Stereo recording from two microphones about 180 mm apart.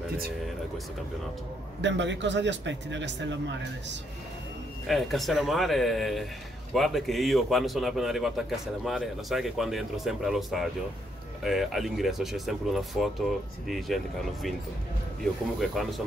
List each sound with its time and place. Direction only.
1.8 s a man's voice: 85° right
4.8 s a man's voice: centre (ahead or behind)
15.6 s a man's voice: centre (ahead or behind)